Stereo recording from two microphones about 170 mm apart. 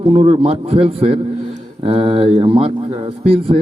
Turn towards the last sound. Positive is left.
turn(degrees=-35)  # may be behind; listen again after turning